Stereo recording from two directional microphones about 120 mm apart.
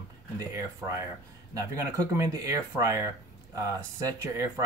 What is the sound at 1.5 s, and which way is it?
Speech, 30° right (ahead or behind).